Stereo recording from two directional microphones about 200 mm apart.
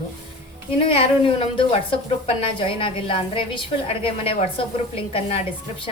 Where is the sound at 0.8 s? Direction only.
30° left (ahead or behind).